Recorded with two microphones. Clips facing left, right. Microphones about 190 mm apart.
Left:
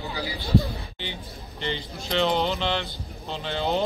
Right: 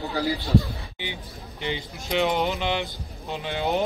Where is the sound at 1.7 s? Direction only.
10° right (ahead or behind).